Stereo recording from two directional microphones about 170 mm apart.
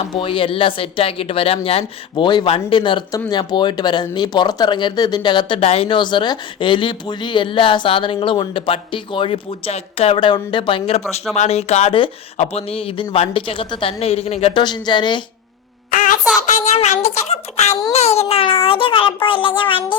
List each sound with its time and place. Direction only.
0.0 s speech: 30° left (ahead or behind)
15.9 s a sound: 55° left (ahead or behind)
16.5 s speech: 45° left (ahead or behind)